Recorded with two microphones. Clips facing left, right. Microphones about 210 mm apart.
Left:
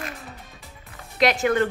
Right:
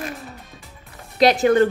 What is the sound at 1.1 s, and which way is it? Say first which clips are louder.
Speech: right 5 dB; 35° right (ahead or behind).